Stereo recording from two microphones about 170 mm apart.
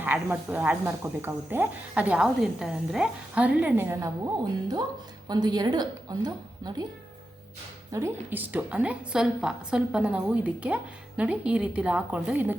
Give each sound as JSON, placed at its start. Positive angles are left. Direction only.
{"t": 0.0, "sound": "speech", "side_deg": -10}
{"t": 5.3, "sound": "a woman's voice", "side_deg": -25}
{"t": 7.9, "sound": "speech", "side_deg": -15}